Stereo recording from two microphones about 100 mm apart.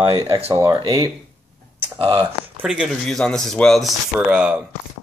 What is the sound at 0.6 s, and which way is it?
Speech, 45° right (ahead or behind).